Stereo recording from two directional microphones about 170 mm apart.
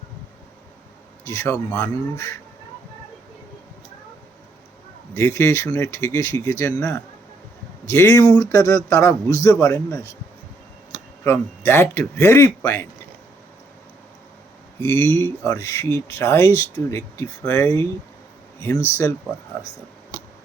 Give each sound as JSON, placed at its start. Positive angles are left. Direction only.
{"t": 1.2, "sound": "speech", "side_deg": 15}
{"t": 5.1, "sound": "speech", "side_deg": 15}
{"t": 11.2, "sound": "speech", "side_deg": 15}
{"t": 14.8, "sound": "speech", "side_deg": 15}
{"t": 18.9, "sound": "speech", "side_deg": 15}